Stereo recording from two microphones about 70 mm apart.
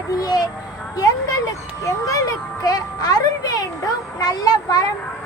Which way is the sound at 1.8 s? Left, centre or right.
Left.